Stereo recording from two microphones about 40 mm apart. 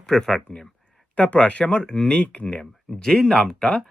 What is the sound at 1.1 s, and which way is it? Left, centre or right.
Speech, left.